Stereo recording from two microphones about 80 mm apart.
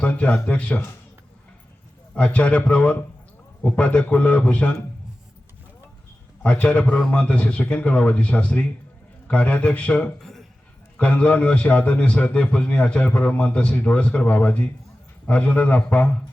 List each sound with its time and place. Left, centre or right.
0.0 s a man's voice: centre
2.1 s a man's voice: centre
6.4 s a man's voice: centre
10.2 s a sound: centre
10.9 s a man's voice: centre